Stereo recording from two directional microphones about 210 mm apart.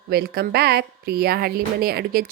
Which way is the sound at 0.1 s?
50° right (ahead or behind).